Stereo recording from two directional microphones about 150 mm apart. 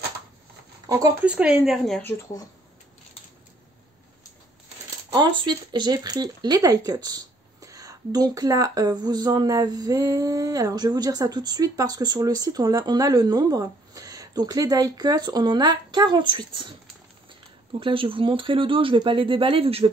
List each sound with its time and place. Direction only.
0.8 s speech: 25° right (ahead or behind)
1.2 s speech: 10° right (ahead or behind)
5.4 s speech: 30° right (ahead or behind)
17.7 s speech: 35° right (ahead or behind)